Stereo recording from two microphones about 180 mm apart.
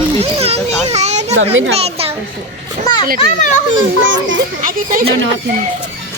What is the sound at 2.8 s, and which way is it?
Children playing, 25° left (ahead or behind).